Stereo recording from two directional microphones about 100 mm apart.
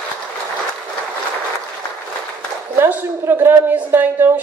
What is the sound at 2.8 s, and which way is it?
A woman's voice, 25° right (ahead or behind).